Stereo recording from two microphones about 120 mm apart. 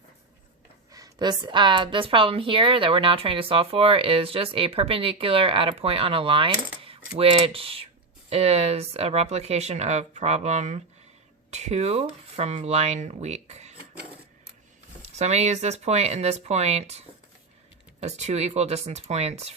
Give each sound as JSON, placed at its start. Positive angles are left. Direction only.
{"t": 0.9, "sound": "a woman's voice", "side_deg": -35}
{"t": 15.0, "sound": "speech", "side_deg": -70}
{"t": 18.0, "sound": "speech", "side_deg": -65}